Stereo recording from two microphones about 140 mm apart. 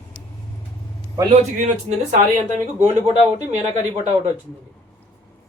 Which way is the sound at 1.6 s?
60° right (ahead or behind).